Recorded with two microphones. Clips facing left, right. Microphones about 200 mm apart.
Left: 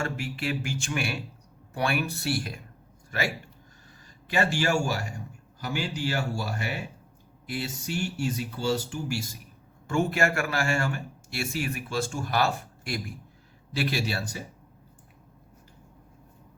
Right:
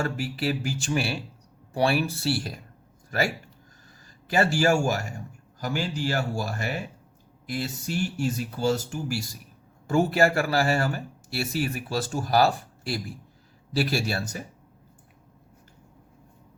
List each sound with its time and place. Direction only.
0.0 s a man's voice: 35° right (ahead or behind)
4.3 s a man's voice: 40° right (ahead or behind)